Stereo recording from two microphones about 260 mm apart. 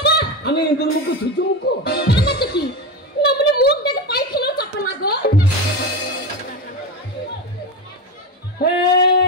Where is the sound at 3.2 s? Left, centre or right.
Left.